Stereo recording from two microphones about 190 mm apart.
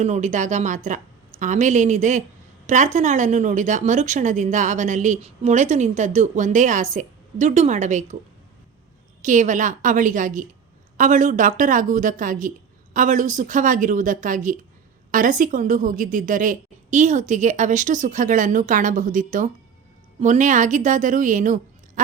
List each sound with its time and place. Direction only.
0.0 s speech: 40° right (ahead or behind)
9.2 s a woman's voice: 40° right (ahead or behind)